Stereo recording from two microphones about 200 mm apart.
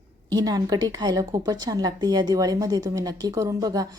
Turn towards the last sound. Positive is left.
turn(degrees=-20)  # may be behind; listen again after turning